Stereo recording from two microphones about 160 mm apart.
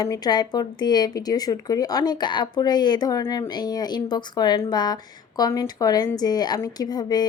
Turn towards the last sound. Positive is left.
turn(degrees=25)  # may be behind; listen again after turning